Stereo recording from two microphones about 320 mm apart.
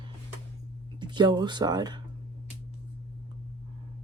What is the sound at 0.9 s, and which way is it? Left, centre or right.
Speech, centre.